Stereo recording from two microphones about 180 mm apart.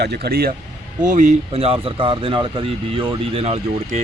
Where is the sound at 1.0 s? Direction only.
45° right (ahead or behind).